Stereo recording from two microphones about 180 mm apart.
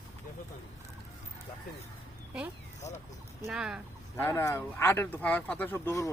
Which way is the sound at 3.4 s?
5° right (ahead or behind).